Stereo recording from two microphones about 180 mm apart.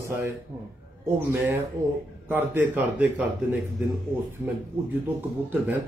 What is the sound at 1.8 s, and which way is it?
Speech, 15° right (ahead or behind).